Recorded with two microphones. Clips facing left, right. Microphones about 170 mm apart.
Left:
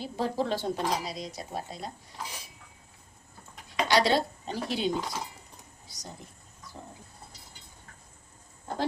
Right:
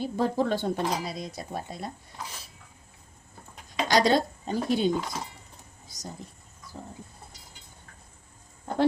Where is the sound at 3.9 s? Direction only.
45° right (ahead or behind).